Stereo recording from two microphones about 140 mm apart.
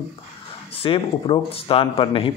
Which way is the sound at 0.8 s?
40° left (ahead or behind).